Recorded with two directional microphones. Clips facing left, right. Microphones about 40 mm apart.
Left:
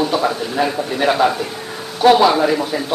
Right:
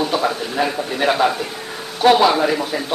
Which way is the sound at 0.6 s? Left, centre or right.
Right.